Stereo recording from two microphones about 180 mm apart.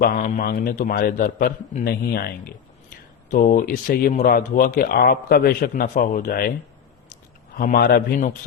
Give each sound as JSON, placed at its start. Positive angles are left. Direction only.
{"t": 0.0, "sound": "speech", "side_deg": 50}
{"t": 7.5, "sound": "speech", "side_deg": 50}